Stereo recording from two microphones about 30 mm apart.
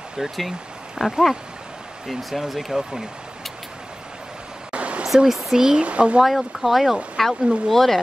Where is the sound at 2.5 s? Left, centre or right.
Centre.